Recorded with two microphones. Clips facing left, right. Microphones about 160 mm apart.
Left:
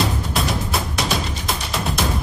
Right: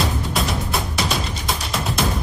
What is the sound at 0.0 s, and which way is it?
Music, centre (ahead or behind).